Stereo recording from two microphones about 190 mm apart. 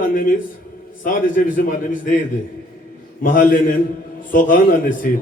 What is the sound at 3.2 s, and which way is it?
Speech, 45° left (ahead or behind).